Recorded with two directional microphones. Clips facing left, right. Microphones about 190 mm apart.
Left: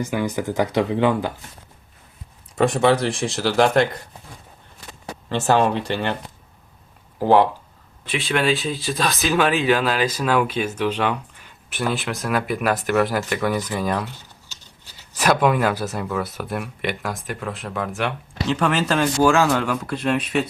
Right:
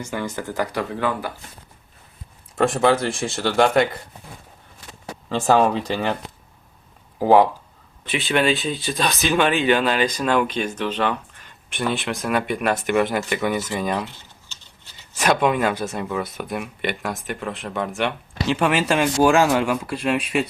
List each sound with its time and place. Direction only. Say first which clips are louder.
0.0 s speech: left 4 dB; 15° left (ahead or behind)
2.6 s speech: left 1 dB; centre (ahead or behind)
5.5 s speech: right 1 dB; 5° right (ahead or behind)
7.2 s speech: right 1 dB; 5° right (ahead or behind)